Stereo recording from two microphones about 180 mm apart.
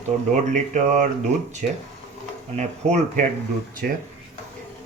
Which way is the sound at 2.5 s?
40° right (ahead or behind).